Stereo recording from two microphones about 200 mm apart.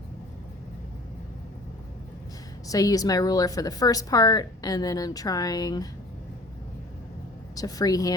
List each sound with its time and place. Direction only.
2.6 s a woman's voice: 15° left (ahead or behind)
7.5 s speech: 20° left (ahead or behind)